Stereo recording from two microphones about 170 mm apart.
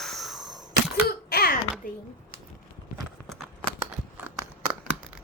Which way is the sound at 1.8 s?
55° left (ahead or behind).